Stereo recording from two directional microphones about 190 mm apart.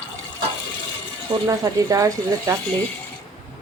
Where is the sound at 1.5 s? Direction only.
15° right (ahead or behind).